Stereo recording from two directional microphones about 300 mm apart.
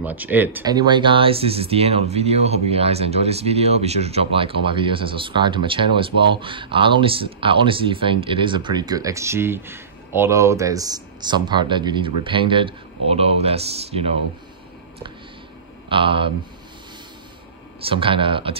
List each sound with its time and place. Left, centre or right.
0.0 s speech: centre
15.9 s speech: centre
17.8 s speech: centre